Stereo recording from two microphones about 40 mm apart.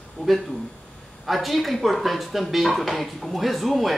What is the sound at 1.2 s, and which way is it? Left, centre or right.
Speech, centre.